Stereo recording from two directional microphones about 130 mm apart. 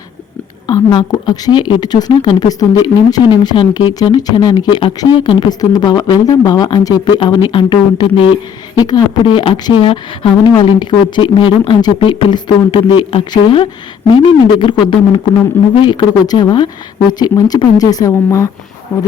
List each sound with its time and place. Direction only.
0.7 s a woman's voice: 35° left (ahead or behind)